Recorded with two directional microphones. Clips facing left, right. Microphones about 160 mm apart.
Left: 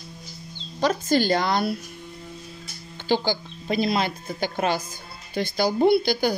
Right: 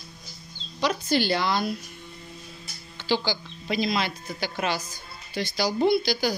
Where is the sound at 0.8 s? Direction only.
45° left (ahead or behind).